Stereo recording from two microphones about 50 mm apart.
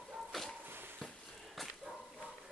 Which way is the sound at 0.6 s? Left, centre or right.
Right.